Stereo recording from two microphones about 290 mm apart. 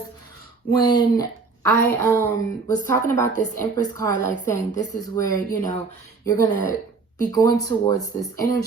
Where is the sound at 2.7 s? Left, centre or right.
Centre.